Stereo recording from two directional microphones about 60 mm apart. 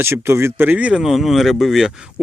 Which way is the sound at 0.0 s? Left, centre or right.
Right.